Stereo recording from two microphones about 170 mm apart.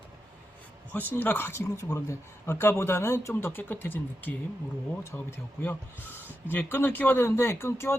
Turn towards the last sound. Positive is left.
turn(degrees=15)  # may be behind; listen again after turning